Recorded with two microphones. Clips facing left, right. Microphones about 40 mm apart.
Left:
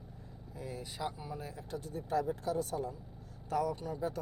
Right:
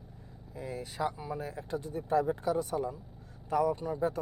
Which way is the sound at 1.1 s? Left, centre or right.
Centre.